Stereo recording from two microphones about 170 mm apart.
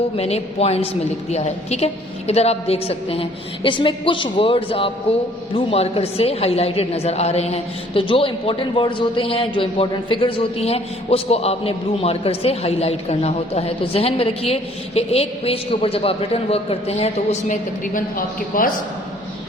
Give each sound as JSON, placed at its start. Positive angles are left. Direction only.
{"t": 0.2, "sound": "a woman's voice", "side_deg": 35}
{"t": 17.5, "sound": "a woman's voice", "side_deg": 55}